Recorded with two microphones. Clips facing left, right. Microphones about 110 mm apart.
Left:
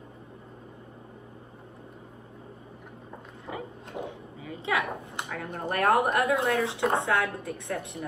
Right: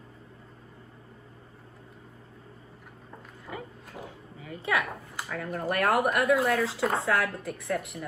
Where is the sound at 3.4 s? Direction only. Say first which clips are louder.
Left 3 dB; 25° left (ahead or behind).